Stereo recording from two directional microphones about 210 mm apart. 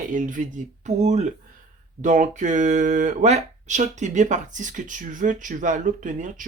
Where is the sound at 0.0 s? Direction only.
40° right (ahead or behind).